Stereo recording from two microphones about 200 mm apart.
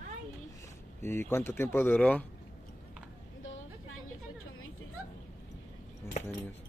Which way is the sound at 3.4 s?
75° left (ahead or behind).